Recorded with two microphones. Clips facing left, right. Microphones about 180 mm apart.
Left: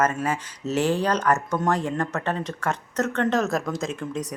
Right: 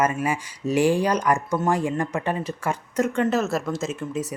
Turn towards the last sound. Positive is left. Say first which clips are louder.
# right 1 dB
turn(degrees=-5)  # may be behind; listen again after turning